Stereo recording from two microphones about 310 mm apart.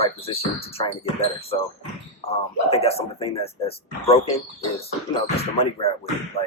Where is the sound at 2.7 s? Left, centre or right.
Centre.